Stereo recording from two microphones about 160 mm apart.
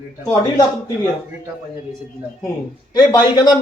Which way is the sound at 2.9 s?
25° left (ahead or behind).